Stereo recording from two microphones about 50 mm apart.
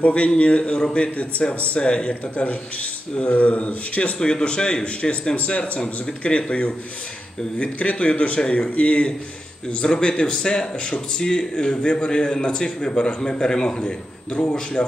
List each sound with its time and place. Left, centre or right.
0.0 s speech: left